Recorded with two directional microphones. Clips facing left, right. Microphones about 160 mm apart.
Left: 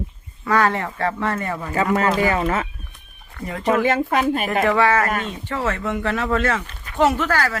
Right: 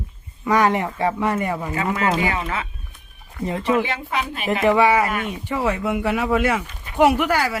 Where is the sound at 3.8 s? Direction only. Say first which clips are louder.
Left 7 dB; 45° left (ahead or behind).